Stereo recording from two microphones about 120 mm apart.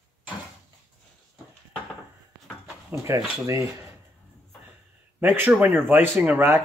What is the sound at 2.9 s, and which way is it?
Speech, 25° right (ahead or behind).